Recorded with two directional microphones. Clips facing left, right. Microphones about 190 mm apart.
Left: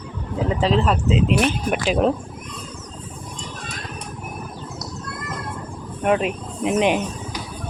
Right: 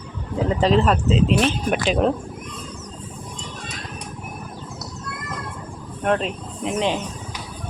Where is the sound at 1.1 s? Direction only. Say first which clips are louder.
Even; 10° left (ahead or behind).